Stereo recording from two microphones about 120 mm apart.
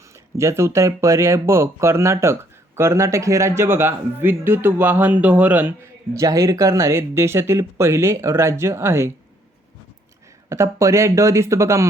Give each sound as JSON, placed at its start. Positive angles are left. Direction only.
{"t": 0.1, "sound": "speech", "side_deg": -25}
{"t": 10.5, "sound": "speech", "side_deg": -25}